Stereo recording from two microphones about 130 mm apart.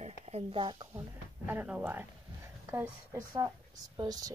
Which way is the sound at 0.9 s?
10° right (ahead or behind).